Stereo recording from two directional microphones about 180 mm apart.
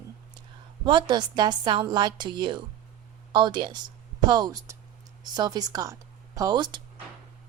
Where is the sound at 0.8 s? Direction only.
25° right (ahead or behind).